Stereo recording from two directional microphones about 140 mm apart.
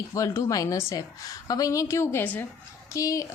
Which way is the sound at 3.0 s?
25° left (ahead or behind).